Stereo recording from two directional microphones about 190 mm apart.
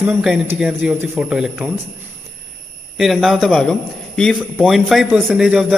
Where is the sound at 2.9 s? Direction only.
Centre (ahead or behind).